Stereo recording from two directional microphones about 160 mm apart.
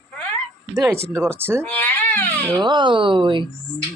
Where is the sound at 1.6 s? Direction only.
10° left (ahead or behind).